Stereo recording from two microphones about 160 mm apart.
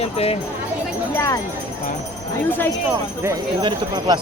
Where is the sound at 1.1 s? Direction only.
20° left (ahead or behind).